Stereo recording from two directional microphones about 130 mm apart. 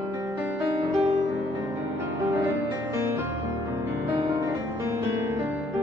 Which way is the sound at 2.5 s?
20° right (ahead or behind).